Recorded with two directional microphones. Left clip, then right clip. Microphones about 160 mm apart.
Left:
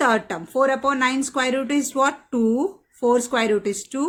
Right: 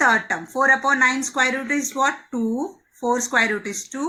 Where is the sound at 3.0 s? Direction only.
45° left (ahead or behind).